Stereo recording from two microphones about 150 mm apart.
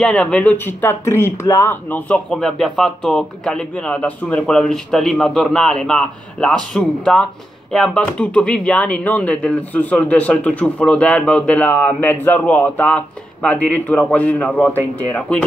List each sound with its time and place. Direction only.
0.0 s speech: 5° left (ahead or behind)